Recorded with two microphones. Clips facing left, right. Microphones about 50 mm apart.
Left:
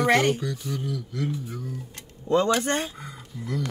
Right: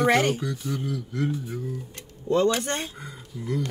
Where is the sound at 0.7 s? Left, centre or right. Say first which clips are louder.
Right 1 dB; right.